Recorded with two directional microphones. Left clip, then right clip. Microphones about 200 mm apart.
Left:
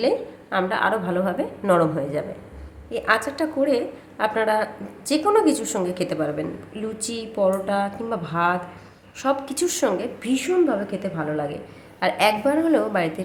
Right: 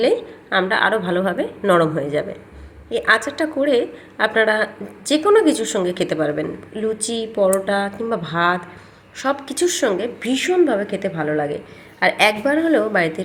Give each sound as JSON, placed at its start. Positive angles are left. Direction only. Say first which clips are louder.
{"t": 0.0, "sound": "a woman's voice", "louder": "right 4 dB", "side_deg": -10}